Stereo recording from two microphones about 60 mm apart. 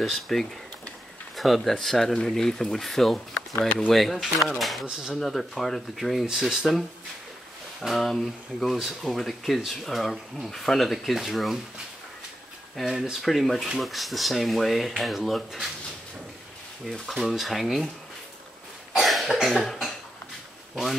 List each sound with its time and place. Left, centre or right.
0.0 s speech: centre
3.5 s speech: left
3.9 s speech: centre
7.8 s speech: centre
12.8 s speech: centre
17.0 s speech: centre
19.0 s cough: centre
19.3 s speech: centre